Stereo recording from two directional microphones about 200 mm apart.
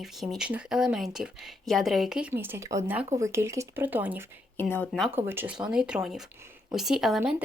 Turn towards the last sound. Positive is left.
turn(degrees=-5)  # may be behind; listen again after turning